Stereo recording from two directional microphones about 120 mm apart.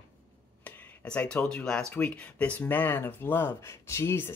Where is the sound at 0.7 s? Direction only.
15° left (ahead or behind).